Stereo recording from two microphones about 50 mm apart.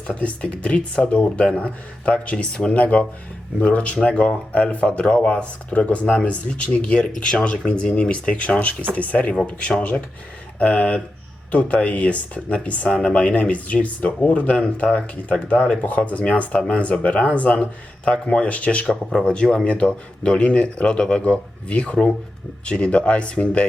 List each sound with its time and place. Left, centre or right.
0.1 s speech: left
10.6 s speech: left
18.9 s speech: centre